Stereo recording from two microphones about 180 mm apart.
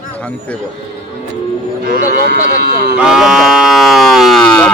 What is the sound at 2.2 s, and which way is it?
Speech, 50° left (ahead or behind).